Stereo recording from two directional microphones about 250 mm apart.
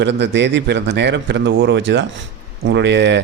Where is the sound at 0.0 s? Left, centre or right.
Right.